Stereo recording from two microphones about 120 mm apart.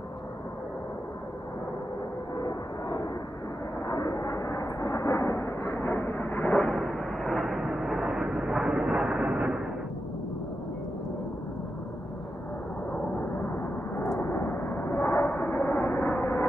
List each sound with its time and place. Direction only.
2.3 s a sound: 40° left (ahead or behind)
3.8 s vehicle: 30° left (ahead or behind); by 9.6 s 5° right (ahead or behind)
13.2 s vehicle: 20° left (ahead or behind)